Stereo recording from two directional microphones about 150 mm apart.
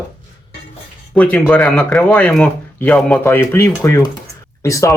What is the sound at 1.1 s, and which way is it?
Speech, 10° left (ahead or behind).